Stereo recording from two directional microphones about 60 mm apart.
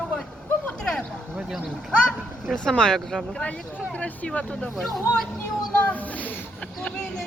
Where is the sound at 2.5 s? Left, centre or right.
Centre.